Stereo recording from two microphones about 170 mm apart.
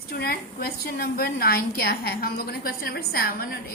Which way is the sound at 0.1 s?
65° left (ahead or behind).